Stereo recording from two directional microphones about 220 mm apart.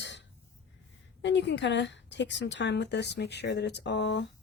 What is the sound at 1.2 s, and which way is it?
A woman's voice, 55° left (ahead or behind).